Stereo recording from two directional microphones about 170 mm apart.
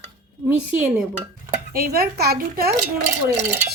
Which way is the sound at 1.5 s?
60° right (ahead or behind).